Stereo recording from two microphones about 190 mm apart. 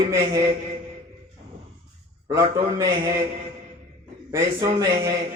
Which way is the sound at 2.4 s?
25° right (ahead or behind).